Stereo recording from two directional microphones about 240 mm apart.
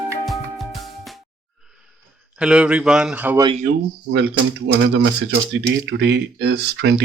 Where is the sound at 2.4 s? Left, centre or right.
Centre.